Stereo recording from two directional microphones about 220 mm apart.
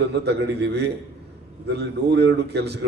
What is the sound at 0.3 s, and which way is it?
A man's voice, 50° right (ahead or behind).